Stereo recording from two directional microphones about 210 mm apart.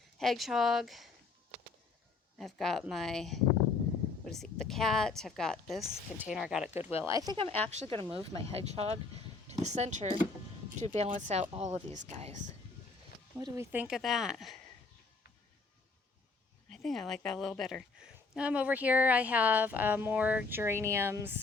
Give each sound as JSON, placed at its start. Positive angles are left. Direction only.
{"t": 0.2, "sound": "speech", "side_deg": 0}
{"t": 2.4, "sound": "a woman's voice", "side_deg": 0}
{"t": 13.4, "sound": "speech", "side_deg": -10}
{"t": 16.7, "sound": "a woman's voice", "side_deg": 0}